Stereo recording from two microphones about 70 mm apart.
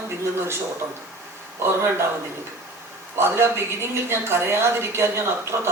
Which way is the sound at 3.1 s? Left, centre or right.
Right.